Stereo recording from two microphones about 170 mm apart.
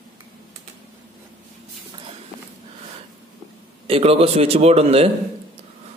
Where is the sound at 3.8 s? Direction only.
35° right (ahead or behind).